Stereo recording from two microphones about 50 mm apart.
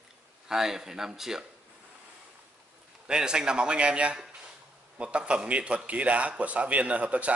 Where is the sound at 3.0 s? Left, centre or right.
Centre.